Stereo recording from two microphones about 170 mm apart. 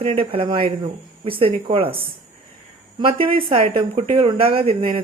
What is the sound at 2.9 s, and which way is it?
Speech, 30° right (ahead or behind).